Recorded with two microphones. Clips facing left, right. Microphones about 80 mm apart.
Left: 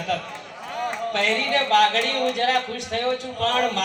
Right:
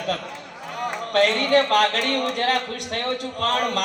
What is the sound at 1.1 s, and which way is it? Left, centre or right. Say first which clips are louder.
Speech: right 7 dB; right.